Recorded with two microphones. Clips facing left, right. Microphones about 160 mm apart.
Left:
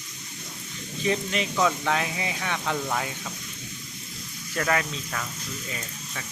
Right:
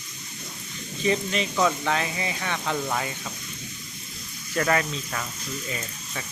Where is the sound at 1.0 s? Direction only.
Centre (ahead or behind).